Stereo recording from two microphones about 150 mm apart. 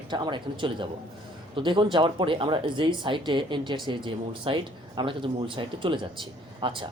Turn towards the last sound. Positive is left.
turn(degrees=-35)  # may be behind; listen again after turning